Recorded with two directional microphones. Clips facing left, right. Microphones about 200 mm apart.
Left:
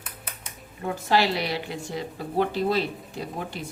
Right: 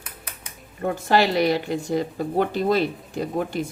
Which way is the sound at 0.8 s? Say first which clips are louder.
Right 3 dB; 50° right (ahead or behind).